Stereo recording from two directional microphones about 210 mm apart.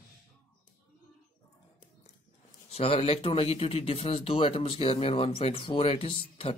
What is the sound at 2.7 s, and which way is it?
Speech, 25° left (ahead or behind).